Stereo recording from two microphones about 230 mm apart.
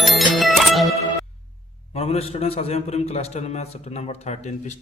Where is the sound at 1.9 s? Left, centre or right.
Left.